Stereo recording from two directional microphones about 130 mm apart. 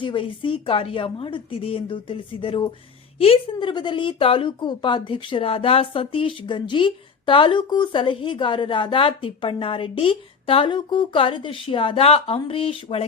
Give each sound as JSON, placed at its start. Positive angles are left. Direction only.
{"t": 0.0, "sound": "a woman's voice", "side_deg": 40}